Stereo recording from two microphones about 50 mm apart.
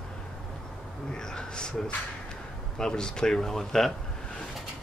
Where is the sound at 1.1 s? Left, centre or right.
Centre.